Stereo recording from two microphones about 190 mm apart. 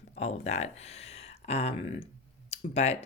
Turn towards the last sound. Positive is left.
turn(degrees=35)  # may be behind; listen again after turning